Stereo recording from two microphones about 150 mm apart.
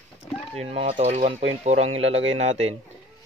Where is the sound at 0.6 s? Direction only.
40° right (ahead or behind).